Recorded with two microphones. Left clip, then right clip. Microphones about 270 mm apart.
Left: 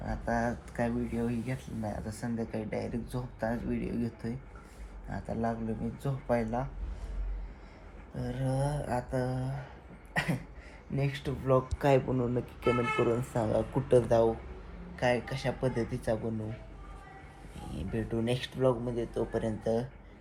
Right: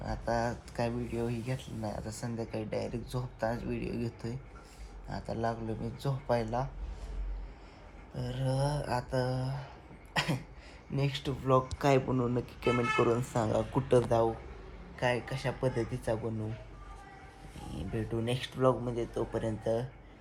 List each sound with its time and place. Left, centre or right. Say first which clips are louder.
0.0 s a sound: even; centre
0.7 s speech: left 1 dB; centre
8.1 s speech: left 1 dB; centre
10.9 s speech: even; centre
17.7 s speech: left 2 dB; centre